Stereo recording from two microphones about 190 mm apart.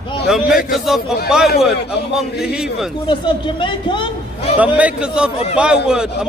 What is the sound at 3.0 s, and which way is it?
A man's voice, 25° left (ahead or behind).